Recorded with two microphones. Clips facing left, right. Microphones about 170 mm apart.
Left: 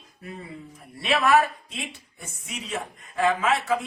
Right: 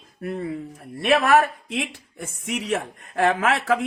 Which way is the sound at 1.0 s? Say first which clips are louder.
Right 4 dB; 50° right (ahead or behind).